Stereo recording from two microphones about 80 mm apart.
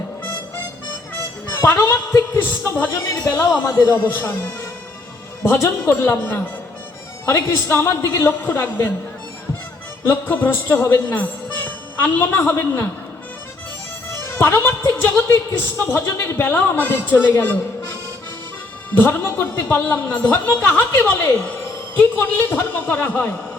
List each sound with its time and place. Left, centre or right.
1.5 s music: left
1.8 s a woman's voice: left
3.2 s a woman's voice: left
7.5 s a woman's voice: left
10.1 s speech: left
14.3 s a woman's voice: left
18.9 s a woman's voice: left